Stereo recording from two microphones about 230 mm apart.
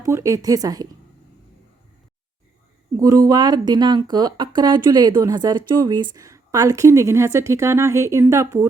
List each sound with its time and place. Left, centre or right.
0.0 s speech: centre
3.0 s speech: centre